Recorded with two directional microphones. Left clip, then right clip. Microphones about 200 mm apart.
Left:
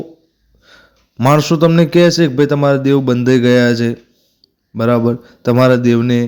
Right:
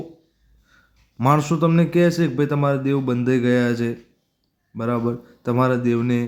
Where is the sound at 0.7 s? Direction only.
30° left (ahead or behind).